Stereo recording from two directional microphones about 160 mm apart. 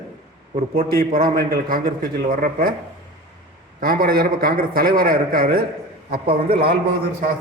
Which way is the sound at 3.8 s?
65° right (ahead or behind).